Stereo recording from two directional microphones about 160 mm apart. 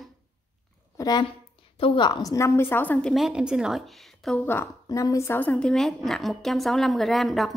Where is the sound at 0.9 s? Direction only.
25° left (ahead or behind); by 4.4 s centre (ahead or behind).